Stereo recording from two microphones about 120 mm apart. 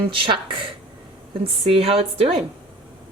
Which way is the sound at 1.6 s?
55° right (ahead or behind).